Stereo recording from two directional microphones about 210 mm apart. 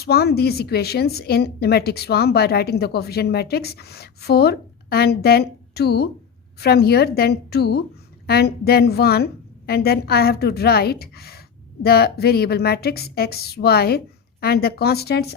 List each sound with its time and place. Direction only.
0.0 s a woman's voice: 50° left (ahead or behind)